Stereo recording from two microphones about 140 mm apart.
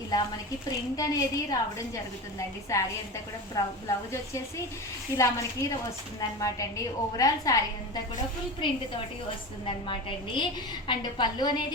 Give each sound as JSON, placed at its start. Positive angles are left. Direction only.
{"t": 0.9, "sound": "a woman's voice", "side_deg": 25}
{"t": 2.7, "sound": "a woman's voice", "side_deg": 20}
{"t": 9.6, "sound": "a woman's voice", "side_deg": 40}